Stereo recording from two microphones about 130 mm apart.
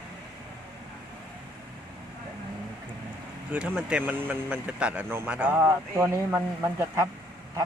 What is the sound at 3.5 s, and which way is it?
Speech, 10° right (ahead or behind).